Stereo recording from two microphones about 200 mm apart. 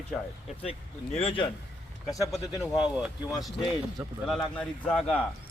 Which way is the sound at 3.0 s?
Centre (ahead or behind).